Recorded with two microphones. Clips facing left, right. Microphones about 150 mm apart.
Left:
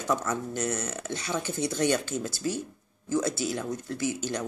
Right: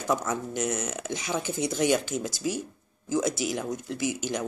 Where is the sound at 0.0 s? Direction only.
10° right (ahead or behind).